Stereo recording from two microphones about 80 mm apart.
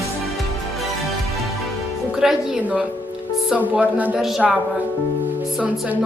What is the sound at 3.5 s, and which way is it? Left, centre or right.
Speech, centre.